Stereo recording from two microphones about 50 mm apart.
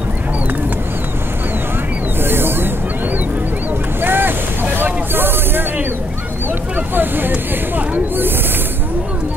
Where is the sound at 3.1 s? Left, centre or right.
Right.